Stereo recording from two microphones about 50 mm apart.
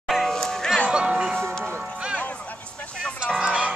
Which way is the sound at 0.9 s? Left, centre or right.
Centre.